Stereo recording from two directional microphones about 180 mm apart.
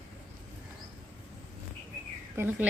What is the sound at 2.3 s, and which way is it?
Speech, 10° right (ahead or behind).